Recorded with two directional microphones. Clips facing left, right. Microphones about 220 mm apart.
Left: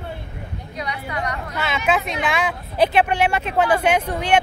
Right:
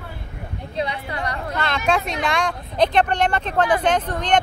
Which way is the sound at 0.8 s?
30° right (ahead or behind).